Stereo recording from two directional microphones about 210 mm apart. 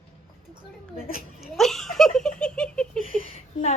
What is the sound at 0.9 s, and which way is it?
Speech, 45° left (ahead or behind).